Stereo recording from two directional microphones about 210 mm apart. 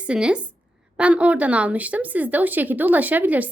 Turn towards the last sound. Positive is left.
turn(degrees=-10)  # may be behind; listen again after turning